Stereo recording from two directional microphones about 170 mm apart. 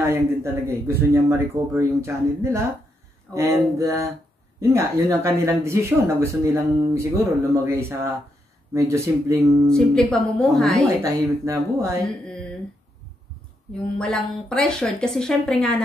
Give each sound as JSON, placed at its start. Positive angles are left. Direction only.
{"t": 0.0, "sound": "speech", "side_deg": -15}
{"t": 9.7, "sound": "speech", "side_deg": 5}
{"t": 11.0, "sound": "speech", "side_deg": -20}
{"t": 13.9, "sound": "speech", "side_deg": 5}